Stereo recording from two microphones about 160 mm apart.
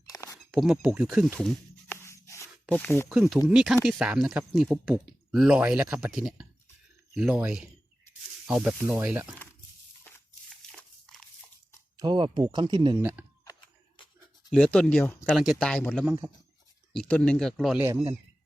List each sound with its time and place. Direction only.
0.1 s a sound: 20° left (ahead or behind)
0.5 s speech: 5° right (ahead or behind)
1.4 s a sound: 5° left (ahead or behind)
2.0 s a sound: 20° left (ahead or behind)
2.7 s speech: 15° left (ahead or behind)
3.1 s speech: 5° right (ahead or behind)
8.8 s speech: 15° right (ahead or behind)
10.1 s a sound: 10° left (ahead or behind)
10.7 s dog: 5° left (ahead or behind)
11.9 s speech: 30° right (ahead or behind)
13.0 s speech: 10° right (ahead or behind)
14.5 s speech: 5° left (ahead or behind)
17.7 s speech: 10° right (ahead or behind)